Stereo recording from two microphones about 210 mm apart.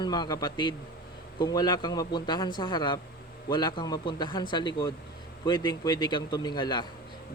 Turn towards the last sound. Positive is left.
turn(degrees=20)  # may be behind; listen again after turning